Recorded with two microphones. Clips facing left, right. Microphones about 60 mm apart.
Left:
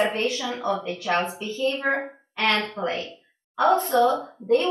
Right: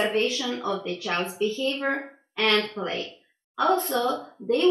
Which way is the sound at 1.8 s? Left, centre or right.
Centre.